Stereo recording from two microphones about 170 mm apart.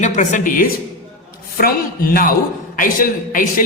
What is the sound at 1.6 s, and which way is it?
A man's voice, 60° left (ahead or behind).